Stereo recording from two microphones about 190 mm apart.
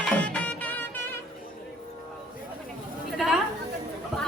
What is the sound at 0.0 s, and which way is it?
Music, 5° left (ahead or behind).